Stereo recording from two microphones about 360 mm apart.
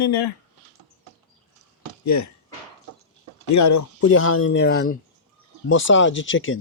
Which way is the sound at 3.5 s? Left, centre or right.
Left.